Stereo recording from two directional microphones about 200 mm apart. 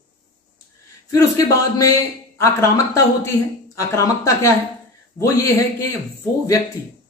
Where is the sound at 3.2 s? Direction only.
15° left (ahead or behind).